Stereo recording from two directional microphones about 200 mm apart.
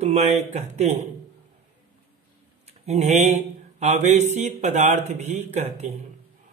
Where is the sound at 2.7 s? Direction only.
35° right (ahead or behind).